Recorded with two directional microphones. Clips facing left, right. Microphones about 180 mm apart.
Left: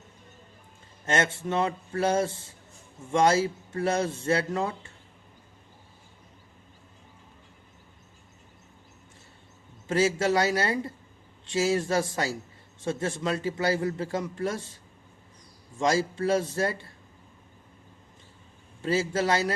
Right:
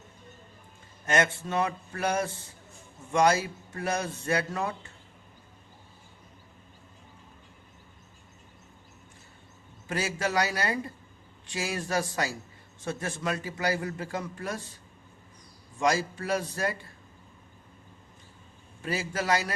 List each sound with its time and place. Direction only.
1.0 s a man's voice: 25° left (ahead or behind)
9.9 s a man's voice: 25° left (ahead or behind)
15.8 s a man's voice: 25° left (ahead or behind)
18.8 s a man's voice: 25° left (ahead or behind)